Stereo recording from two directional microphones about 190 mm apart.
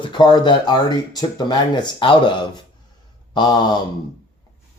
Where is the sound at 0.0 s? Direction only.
25° left (ahead or behind).